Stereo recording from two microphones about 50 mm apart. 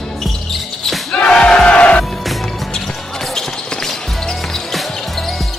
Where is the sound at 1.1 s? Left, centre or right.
Centre.